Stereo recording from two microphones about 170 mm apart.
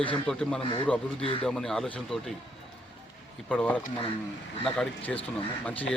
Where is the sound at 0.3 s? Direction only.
5° left (ahead or behind).